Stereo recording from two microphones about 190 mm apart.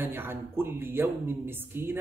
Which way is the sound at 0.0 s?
10° right (ahead or behind).